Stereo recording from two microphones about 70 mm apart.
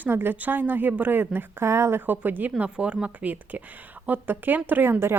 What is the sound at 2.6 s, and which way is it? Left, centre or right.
A woman's voice, centre.